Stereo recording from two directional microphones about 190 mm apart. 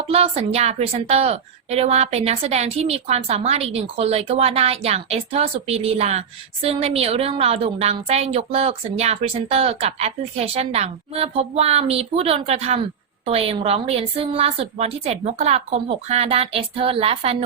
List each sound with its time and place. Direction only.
0.1 s a woman's voice: 30° right (ahead or behind)